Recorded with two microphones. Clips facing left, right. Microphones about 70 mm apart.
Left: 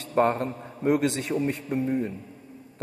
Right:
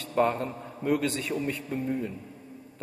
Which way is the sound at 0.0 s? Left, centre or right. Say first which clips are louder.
Left 3 dB; left.